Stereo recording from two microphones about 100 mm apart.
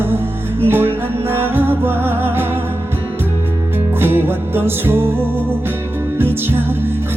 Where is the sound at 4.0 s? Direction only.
20° right (ahead or behind).